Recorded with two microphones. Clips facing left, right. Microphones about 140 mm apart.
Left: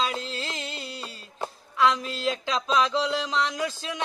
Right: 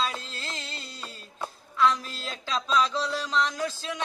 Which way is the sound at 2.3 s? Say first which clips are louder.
Left 3 dB; 15° left (ahead or behind).